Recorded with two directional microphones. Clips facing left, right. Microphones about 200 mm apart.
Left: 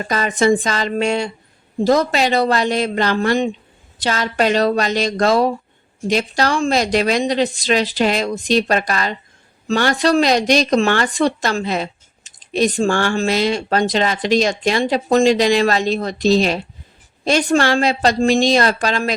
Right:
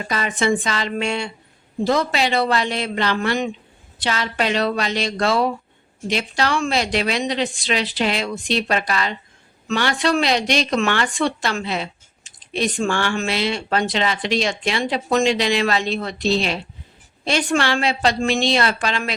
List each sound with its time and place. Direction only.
0.1 s a woman's voice: 40° left (ahead or behind)